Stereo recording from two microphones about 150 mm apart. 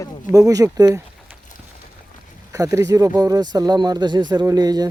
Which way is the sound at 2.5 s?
20° right (ahead or behind).